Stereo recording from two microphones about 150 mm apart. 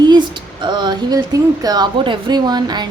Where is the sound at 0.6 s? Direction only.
30° right (ahead or behind).